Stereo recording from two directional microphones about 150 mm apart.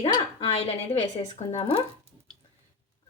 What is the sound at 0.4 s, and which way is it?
Speech, 45° left (ahead or behind).